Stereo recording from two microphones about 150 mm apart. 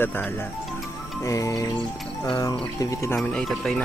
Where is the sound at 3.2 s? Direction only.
Centre (ahead or behind).